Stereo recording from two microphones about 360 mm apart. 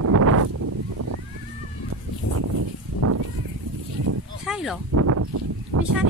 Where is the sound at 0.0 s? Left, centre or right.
Right.